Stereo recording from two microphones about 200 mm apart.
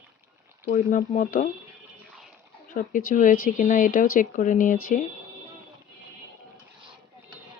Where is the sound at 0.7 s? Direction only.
40° left (ahead or behind).